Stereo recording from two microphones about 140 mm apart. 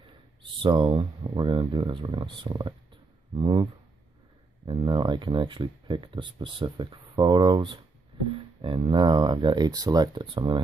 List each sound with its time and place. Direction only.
0.6 s speech: 35° right (ahead or behind)
4.6 s speech: 35° right (ahead or behind)